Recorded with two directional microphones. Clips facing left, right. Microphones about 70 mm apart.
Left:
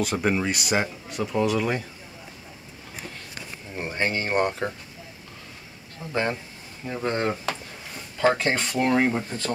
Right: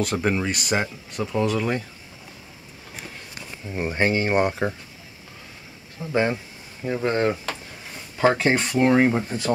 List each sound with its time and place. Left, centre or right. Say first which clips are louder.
0.0 s speech: right 1 dB; centre
3.7 s speech: right 5 dB; right
6.0 s speech: right 4 dB; centre